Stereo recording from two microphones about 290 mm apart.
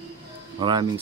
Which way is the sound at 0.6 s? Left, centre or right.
Centre.